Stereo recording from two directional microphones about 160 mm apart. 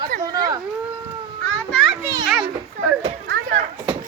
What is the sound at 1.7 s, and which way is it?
Children playing, centre (ahead or behind).